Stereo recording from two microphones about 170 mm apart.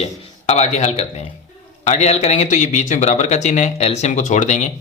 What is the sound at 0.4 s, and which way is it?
A man's voice, 40° left (ahead or behind).